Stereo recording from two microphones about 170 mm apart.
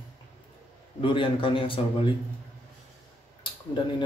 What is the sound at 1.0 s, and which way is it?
A man's voice, 30° left (ahead or behind).